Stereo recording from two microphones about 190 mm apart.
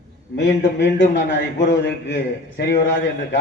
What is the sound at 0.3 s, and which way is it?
A man's voice, 65° left (ahead or behind).